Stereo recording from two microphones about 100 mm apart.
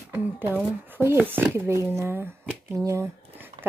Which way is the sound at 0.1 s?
20° right (ahead or behind).